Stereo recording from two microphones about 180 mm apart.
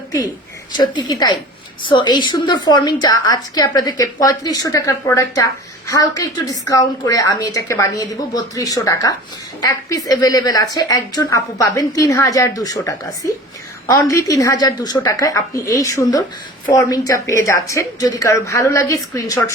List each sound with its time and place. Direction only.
0.8 s a woman's voice: 25° left (ahead or behind)